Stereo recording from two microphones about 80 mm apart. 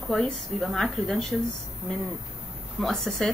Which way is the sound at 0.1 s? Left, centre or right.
Centre.